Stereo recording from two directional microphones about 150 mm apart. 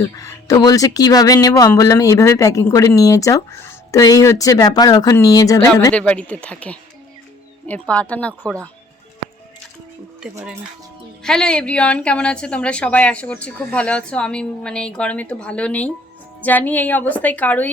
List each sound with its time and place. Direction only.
0.0 s speech: 25° left (ahead or behind)
5.9 s speech: 10° left (ahead or behind)
10.2 s speech: 5° right (ahead or behind)